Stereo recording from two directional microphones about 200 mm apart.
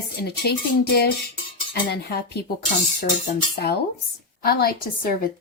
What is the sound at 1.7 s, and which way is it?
Cutlery, 55° left (ahead or behind).